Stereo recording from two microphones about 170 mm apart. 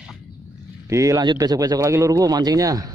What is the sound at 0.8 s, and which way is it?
A man's voice, 20° right (ahead or behind).